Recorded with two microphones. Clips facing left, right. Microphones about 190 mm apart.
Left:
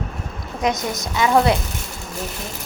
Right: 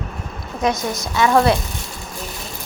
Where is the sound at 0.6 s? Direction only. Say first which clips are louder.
Right 1 dB; 20° left (ahead or behind).